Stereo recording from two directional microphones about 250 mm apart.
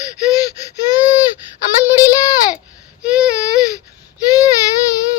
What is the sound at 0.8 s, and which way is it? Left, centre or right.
Gasp, centre.